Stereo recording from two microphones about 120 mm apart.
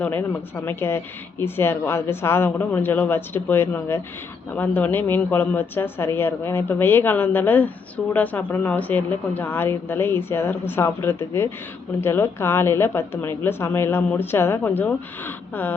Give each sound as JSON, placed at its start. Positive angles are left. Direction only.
{"t": 0.0, "sound": "a woman's voice", "side_deg": 15}